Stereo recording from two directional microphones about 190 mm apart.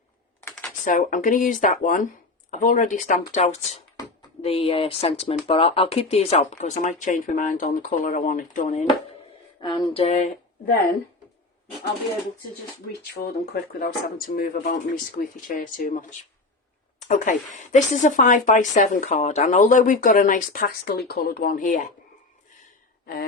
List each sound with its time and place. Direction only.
0.9 s speech: 45° left (ahead or behind)
9.6 s speech: 20° left (ahead or behind); by 10.8 s 45° left (ahead or behind)
13.2 s speech: 35° left (ahead or behind)
13.5 s speech: 50° left (ahead or behind)